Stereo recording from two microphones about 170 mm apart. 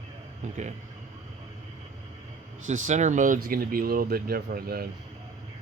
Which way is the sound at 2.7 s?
45° right (ahead or behind).